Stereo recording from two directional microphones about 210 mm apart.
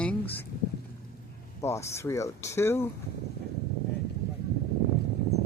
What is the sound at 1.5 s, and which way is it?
Speech, 15° left (ahead or behind).